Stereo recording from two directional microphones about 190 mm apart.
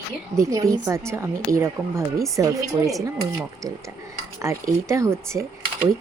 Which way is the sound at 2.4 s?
15° right (ahead or behind).